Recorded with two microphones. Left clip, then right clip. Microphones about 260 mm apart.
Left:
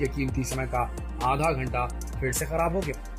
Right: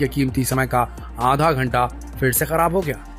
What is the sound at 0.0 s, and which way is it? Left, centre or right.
Speech, centre.